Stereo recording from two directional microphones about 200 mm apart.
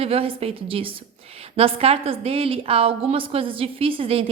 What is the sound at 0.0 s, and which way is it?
A woman's voice, 30° right (ahead or behind).